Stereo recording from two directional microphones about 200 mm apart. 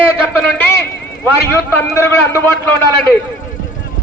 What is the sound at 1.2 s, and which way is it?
A man's voice, 10° left (ahead or behind).